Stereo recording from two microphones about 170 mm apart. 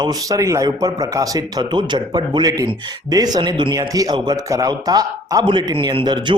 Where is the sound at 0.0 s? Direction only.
20° right (ahead or behind).